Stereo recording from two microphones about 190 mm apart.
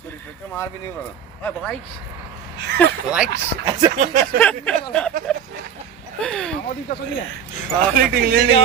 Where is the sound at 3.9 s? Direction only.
40° right (ahead or behind).